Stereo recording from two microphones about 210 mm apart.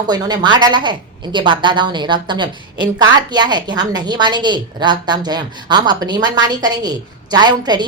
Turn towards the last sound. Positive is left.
turn(degrees=-20)  # may be behind; listen again after turning